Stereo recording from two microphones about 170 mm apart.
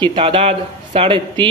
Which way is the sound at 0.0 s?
30° right (ahead or behind).